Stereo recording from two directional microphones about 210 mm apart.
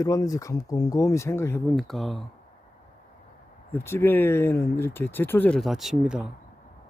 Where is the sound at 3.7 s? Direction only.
10° left (ahead or behind).